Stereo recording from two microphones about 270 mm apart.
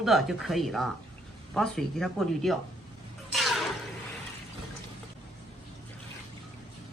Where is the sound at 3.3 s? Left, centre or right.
Centre.